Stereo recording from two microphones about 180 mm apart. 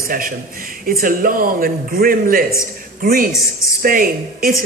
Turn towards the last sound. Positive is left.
turn(degrees=-55)  # may be behind; listen again after turning